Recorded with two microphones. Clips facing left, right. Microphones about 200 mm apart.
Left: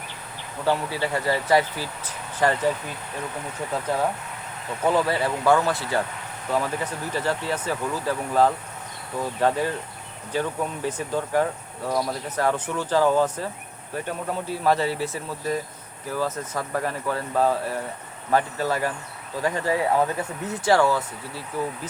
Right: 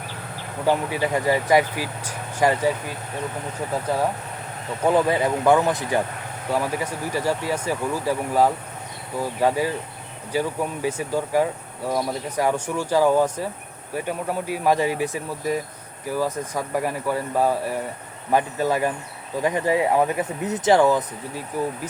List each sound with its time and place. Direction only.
0.6 s speech: 15° right (ahead or behind)
4.9 s speech: 15° right (ahead or behind)